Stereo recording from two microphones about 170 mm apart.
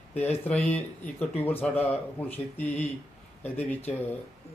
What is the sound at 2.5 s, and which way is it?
Speech, 10° left (ahead or behind).